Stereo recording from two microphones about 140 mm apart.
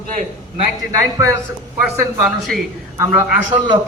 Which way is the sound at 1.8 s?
5° right (ahead or behind).